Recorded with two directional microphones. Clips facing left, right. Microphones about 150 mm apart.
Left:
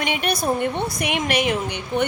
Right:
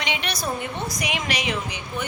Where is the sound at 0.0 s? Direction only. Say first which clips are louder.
Left 5 dB; 50° left (ahead or behind).